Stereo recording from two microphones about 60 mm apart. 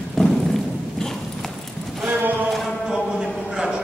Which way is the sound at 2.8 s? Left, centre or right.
Centre.